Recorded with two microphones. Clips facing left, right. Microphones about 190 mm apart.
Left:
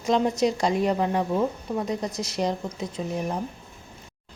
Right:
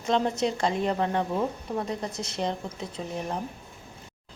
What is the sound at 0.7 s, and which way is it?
Speech, 10° left (ahead or behind).